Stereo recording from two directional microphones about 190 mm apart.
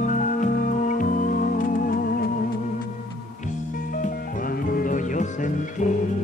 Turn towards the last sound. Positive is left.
turn(degrees=40)  # may be behind; listen again after turning